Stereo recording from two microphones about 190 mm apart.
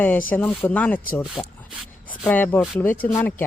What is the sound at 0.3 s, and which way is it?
Speech, 10° left (ahead or behind).